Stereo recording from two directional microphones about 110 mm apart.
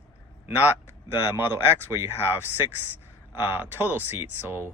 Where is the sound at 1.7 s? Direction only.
25° right (ahead or behind).